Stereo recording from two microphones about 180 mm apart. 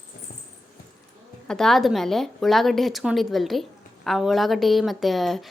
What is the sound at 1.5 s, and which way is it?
A woman's voice, 5° left (ahead or behind).